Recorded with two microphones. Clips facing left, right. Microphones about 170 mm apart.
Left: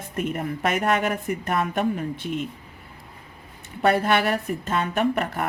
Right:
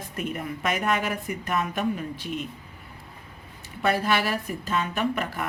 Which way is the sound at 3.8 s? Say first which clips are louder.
Left 4 dB; 55° left (ahead or behind).